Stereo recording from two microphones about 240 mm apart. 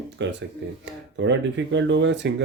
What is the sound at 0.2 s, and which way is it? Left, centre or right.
Speech, right.